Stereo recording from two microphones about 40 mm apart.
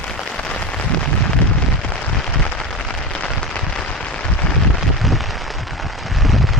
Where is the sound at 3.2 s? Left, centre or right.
Left.